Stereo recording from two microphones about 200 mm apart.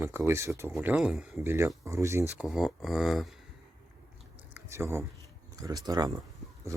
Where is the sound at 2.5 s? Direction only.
Centre (ahead or behind).